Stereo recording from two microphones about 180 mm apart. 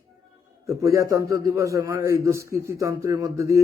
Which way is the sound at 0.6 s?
15° right (ahead or behind).